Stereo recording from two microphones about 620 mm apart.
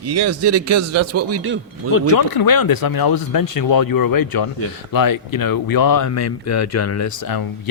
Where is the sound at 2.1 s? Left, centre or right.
Left.